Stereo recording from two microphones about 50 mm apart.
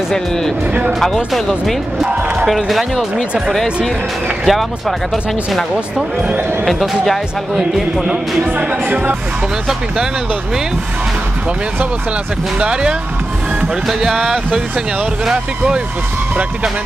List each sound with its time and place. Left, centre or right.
0.9 s speech: centre
8.5 s speech: right
12.5 s speech: centre
13.8 s speech: centre